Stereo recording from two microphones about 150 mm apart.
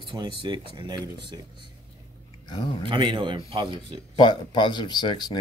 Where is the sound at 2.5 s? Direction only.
35° left (ahead or behind).